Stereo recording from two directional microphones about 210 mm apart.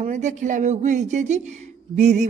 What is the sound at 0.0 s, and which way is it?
A man's voice, 35° right (ahead or behind).